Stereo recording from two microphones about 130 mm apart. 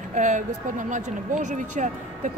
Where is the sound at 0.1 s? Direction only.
70° right (ahead or behind).